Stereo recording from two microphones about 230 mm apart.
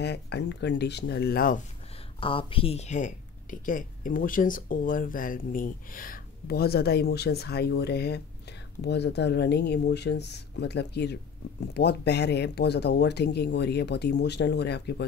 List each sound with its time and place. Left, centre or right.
0.0 s speech: left
2.1 s speech: left